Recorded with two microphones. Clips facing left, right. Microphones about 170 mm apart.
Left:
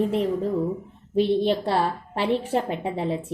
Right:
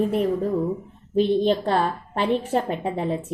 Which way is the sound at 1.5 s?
15° left (ahead or behind).